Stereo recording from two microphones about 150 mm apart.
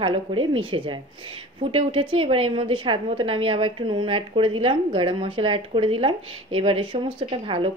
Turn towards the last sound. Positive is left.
turn(degrees=-35)  # may be behind; listen again after turning